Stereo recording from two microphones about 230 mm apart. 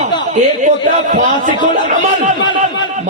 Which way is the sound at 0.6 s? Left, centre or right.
Right.